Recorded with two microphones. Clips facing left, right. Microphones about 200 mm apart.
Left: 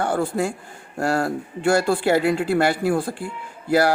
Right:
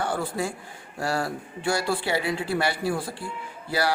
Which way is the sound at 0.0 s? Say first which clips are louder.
Left 6 dB; 50° left (ahead or behind).